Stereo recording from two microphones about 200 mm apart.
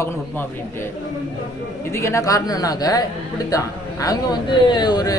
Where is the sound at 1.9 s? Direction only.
15° left (ahead or behind).